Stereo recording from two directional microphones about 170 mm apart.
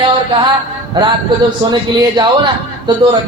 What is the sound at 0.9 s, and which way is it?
A man's voice, 25° right (ahead or behind).